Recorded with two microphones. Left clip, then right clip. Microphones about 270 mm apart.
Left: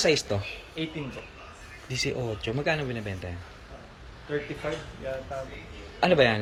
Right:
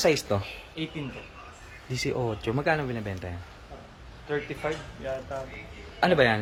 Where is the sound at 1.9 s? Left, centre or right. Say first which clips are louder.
Right 1 dB; centre.